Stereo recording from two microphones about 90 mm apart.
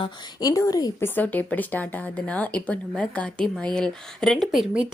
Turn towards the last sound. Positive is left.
turn(degrees=0)  # may be behind; listen again after turning